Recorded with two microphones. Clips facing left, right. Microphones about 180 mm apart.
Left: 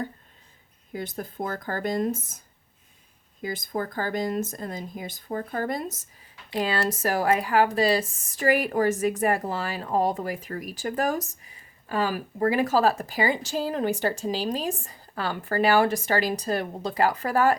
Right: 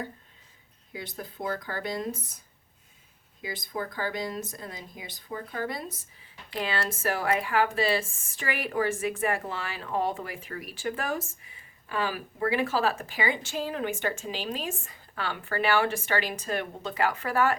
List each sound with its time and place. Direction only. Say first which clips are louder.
0.9 s speech: left 6 dB; 45° left (ahead or behind)
3.4 s speech: left 5 dB; 45° left (ahead or behind)